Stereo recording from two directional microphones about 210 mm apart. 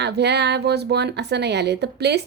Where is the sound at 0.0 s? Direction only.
55° right (ahead or behind).